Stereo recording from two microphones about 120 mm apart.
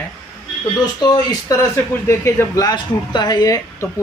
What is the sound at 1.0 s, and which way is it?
Speech, 35° left (ahead or behind).